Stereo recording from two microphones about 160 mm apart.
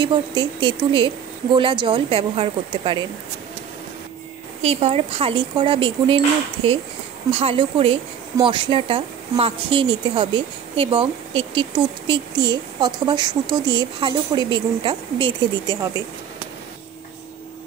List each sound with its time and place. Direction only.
0.0 s a woman's voice: 30° right (ahead or behind)
4.6 s a woman's voice: 40° right (ahead or behind)
7.2 s a woman's voice: 35° right (ahead or behind)